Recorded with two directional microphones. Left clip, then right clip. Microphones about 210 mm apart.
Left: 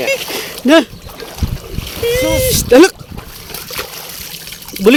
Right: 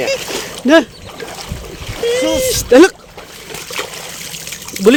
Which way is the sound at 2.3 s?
20° left (ahead or behind).